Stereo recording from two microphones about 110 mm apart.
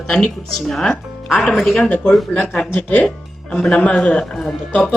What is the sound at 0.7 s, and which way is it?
A man's voice, 5° left (ahead or behind).